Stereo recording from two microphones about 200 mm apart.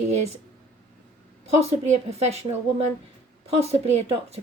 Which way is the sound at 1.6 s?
35° right (ahead or behind).